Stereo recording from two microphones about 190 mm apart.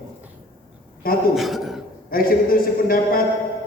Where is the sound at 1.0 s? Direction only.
50° left (ahead or behind).